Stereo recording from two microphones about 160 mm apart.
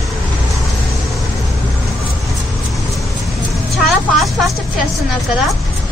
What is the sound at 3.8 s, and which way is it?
Vehicle, centre (ahead or behind).